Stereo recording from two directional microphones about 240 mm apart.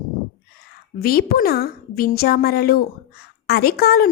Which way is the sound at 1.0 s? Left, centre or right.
Left.